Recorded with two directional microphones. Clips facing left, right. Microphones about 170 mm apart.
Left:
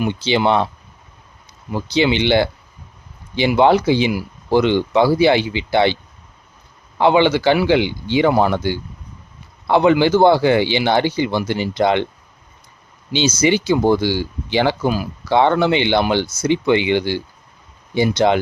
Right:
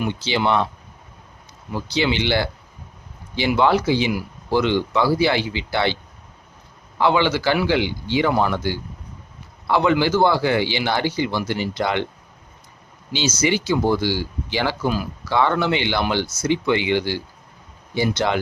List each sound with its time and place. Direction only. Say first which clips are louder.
0.1 s speech: left 4 dB; 20° left (ahead or behind)
1.7 s speech: left 5 dB; 20° left (ahead or behind)
7.0 s speech: left 5 dB; 20° left (ahead or behind)
9.6 s speech: left 5 dB; 20° left (ahead or behind)
13.1 s speech: left 5 dB; 20° left (ahead or behind)